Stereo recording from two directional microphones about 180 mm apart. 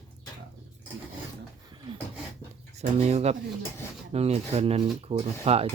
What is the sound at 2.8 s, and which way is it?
Speech, 35° right (ahead or behind).